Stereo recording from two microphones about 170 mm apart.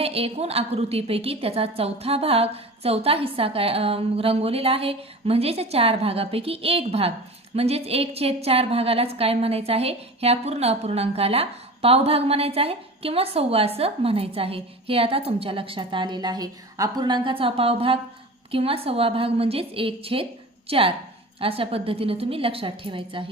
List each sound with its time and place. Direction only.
0.0 s a woman's voice: 35° right (ahead or behind)